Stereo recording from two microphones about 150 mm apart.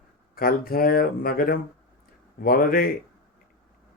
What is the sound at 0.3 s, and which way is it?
Speech, 80° left.